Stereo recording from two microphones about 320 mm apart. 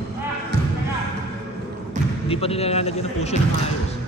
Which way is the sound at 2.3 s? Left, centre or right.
Centre.